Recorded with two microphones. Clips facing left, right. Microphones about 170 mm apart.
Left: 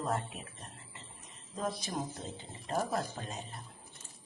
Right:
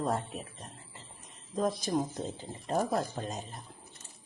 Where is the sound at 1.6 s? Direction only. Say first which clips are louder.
Right 7 dB; 40° right (ahead or behind).